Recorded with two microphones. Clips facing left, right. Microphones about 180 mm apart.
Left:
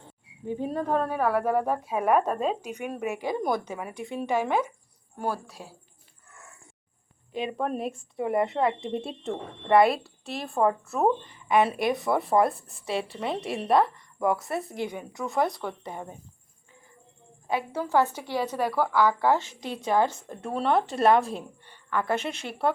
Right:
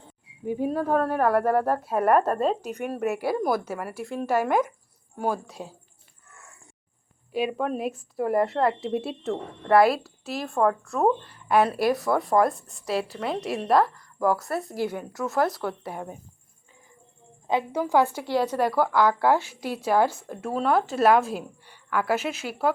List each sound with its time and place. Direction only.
0.4 s speech: 10° right (ahead or behind)
1.1 s speech: 10° left (ahead or behind)
3.2 s speech: 5° right (ahead or behind)
5.6 s speech: 20° right (ahead or behind)
7.3 s speech: 5° right (ahead or behind)
17.5 s speech: 15° right (ahead or behind)